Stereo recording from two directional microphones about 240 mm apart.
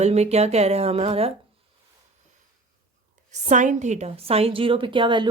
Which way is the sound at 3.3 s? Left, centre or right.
Right.